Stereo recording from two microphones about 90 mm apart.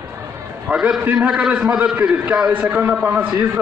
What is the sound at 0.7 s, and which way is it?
A man's voice, 15° right (ahead or behind).